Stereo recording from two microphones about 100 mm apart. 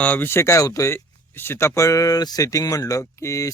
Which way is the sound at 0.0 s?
20° left (ahead or behind).